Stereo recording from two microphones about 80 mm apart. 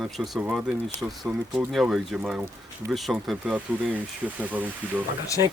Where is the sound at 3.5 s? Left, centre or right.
Centre.